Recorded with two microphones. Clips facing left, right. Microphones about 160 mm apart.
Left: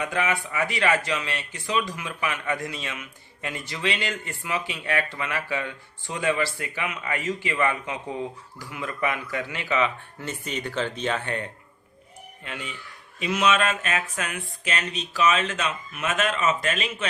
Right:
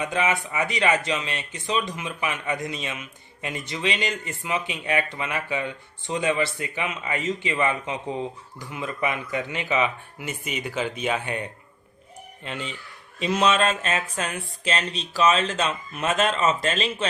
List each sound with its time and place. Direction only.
0.0 s speech: 20° right (ahead or behind)
12.5 s speech: 25° right (ahead or behind)